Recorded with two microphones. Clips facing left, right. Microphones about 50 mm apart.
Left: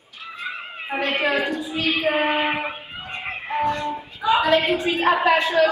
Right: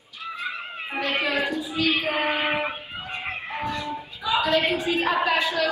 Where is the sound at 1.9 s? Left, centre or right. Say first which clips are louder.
Left 5 dB; centre.